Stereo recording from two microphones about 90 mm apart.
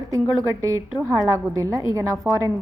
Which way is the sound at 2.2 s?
25° right (ahead or behind).